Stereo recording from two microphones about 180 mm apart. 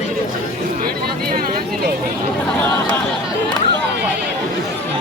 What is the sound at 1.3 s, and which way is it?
Speech, 55° right (ahead or behind).